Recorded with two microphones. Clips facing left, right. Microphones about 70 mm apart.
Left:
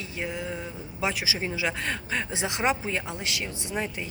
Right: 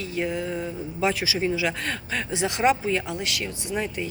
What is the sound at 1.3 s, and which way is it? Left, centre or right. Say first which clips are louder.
Speech: right 4 dB; left.